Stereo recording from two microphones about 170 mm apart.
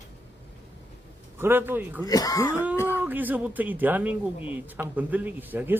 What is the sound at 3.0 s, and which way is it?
Speech, 10° right (ahead or behind).